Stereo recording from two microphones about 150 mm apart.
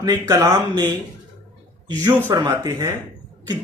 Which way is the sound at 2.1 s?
15° right (ahead or behind).